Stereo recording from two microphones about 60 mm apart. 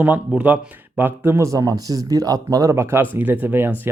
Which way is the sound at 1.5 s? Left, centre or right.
Right.